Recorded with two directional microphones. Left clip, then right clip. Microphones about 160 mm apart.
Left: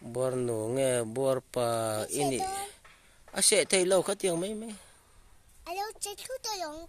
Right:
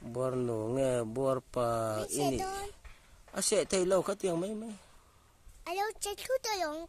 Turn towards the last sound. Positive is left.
turn(degrees=-35)  # may be behind; listen again after turning